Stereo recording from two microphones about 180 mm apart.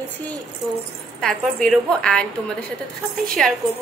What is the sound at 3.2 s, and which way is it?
Speech, 5° left (ahead or behind).